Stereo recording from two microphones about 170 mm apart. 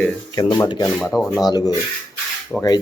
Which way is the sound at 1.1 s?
Centre (ahead or behind).